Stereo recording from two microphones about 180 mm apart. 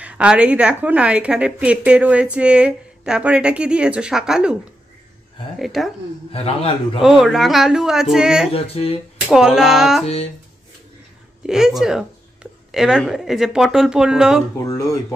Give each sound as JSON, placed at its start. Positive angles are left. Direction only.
{"t": 0.0, "sound": "a woman's voice", "side_deg": -5}
{"t": 5.6, "sound": "a woman's voice", "side_deg": 0}
{"t": 6.3, "sound": "a man's voice", "side_deg": 35}
{"t": 7.0, "sound": "a woman's voice", "side_deg": 0}
{"t": 8.5, "sound": "a man's voice", "side_deg": 35}
{"t": 9.3, "sound": "a woman's voice", "side_deg": -5}
{"t": 11.4, "sound": "a woman's voice", "side_deg": -5}